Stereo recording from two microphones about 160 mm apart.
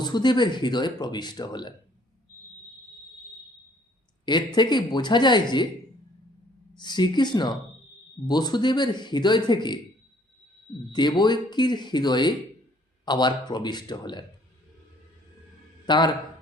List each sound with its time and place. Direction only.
0.0 s speech: 25° left (ahead or behind)
4.3 s speech: 30° left (ahead or behind)
6.7 s speech: 25° left (ahead or behind)
10.9 s speech: 25° left (ahead or behind)
15.9 s speech: 30° left (ahead or behind)